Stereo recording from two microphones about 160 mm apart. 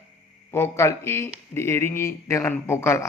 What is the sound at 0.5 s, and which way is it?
A man's voice, 15° left (ahead or behind).